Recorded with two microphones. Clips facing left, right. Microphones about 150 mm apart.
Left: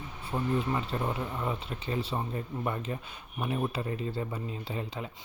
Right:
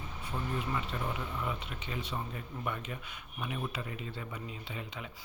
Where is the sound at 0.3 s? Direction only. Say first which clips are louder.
Left 6 dB; 35° left (ahead or behind).